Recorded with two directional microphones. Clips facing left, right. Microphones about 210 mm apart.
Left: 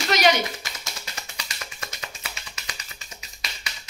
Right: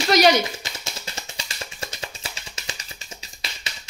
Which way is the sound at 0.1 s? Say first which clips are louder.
Right 4 dB; 35° right (ahead or behind).